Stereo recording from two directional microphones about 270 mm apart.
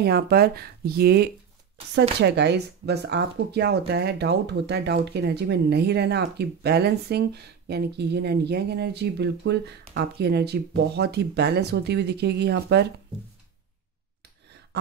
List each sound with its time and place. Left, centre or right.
0.0 s speech: right